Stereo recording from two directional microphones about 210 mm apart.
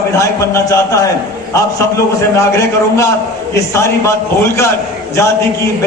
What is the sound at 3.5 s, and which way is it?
A man's voice, 15° left (ahead or behind).